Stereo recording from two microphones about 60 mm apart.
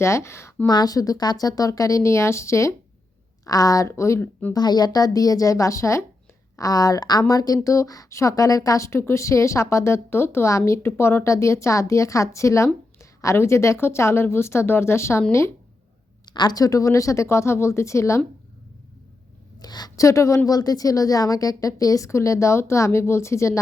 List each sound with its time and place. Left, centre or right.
0.0 s speech: left
0.9 s speech: left
3.4 s a woman's voice: left
3.8 s speech: left
4.2 s speech: left
4.5 s a woman's voice: left
6.6 s speech: left
16.6 s speech: left
19.8 s speech: left